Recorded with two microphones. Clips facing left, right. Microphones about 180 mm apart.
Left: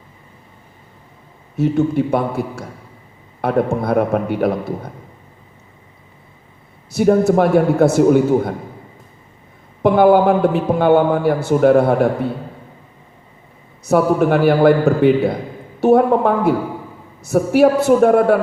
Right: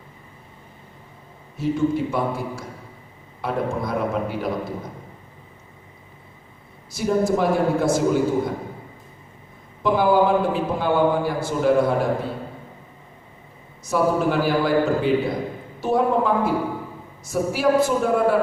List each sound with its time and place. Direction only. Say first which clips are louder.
1.5 s a man's voice: left 5 dB; 65° left (ahead or behind)
6.9 s a man's voice: left 8 dB; 60° left (ahead or behind)
9.8 s a man's voice: left 7 dB; 60° left (ahead or behind)
13.8 s a man's voice: left 6 dB; 65° left (ahead or behind)